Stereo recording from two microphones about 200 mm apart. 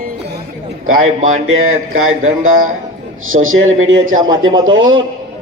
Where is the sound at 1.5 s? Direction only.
90° right.